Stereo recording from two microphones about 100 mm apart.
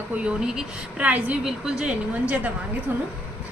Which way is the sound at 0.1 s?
10° right (ahead or behind).